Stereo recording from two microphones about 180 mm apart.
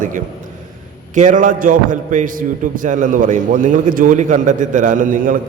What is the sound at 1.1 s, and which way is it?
A man's voice, 45° right (ahead or behind).